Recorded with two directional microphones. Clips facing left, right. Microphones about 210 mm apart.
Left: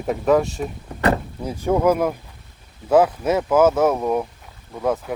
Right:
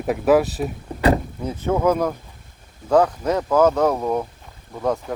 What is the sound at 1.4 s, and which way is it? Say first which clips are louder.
Speech: left 1 dB; 10° left (ahead or behind).